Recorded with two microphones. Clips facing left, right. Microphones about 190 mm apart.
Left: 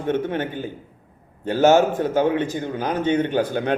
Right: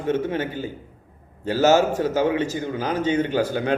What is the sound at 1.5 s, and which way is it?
A man's voice, 55° left (ahead or behind).